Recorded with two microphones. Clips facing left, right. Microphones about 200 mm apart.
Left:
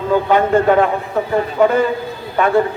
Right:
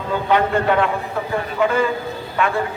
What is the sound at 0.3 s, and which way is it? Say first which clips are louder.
A man's voice: left 3 dB; 45° left (ahead or behind).